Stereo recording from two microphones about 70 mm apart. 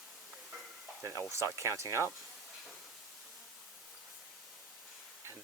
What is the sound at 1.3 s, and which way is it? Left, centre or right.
Speech, right.